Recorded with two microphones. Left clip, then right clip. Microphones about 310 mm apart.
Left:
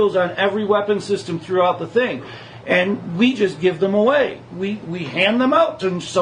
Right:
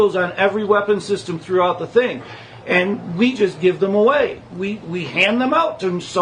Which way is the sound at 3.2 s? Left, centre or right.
Centre.